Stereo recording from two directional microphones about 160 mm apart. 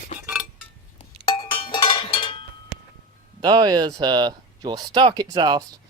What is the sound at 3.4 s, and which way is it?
Speech, 25° right (ahead or behind).